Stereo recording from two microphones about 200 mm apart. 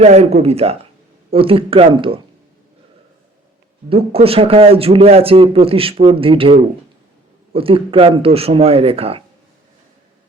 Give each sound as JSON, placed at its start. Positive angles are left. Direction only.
{"t": 0.0, "sound": "speech", "side_deg": -30}
{"t": 3.8, "sound": "speech", "side_deg": -30}